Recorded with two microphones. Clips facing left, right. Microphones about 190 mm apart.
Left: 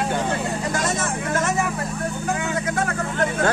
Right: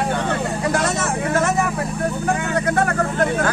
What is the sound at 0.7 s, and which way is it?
Speech, 60° right (ahead or behind).